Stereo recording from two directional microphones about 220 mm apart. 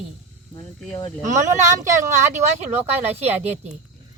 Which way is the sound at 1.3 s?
35° right (ahead or behind).